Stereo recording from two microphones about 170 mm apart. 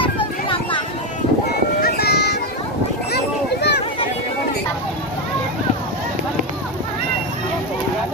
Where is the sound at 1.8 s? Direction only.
70° left (ahead or behind).